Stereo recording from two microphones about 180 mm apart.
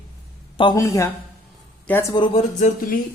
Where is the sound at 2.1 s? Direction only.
25° left (ahead or behind).